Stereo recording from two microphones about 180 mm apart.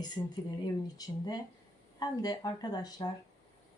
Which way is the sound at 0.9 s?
20° left (ahead or behind).